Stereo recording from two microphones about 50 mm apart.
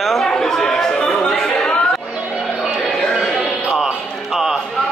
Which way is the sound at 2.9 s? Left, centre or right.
Centre.